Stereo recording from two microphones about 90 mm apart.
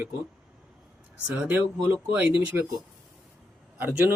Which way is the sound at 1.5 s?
20° right (ahead or behind).